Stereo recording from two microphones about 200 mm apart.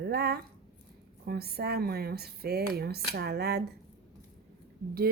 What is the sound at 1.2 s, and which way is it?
Speech, 50° right (ahead or behind).